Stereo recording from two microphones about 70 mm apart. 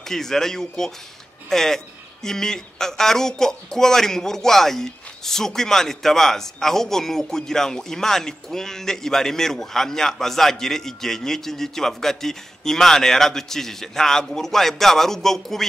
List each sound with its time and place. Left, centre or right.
0.0 s speech: centre